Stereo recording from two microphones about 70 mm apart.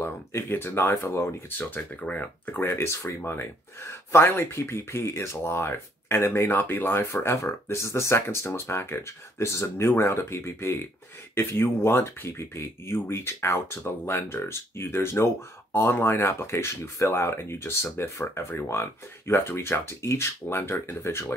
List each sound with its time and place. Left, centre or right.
0.0 s speech: left
2.6 s speech: left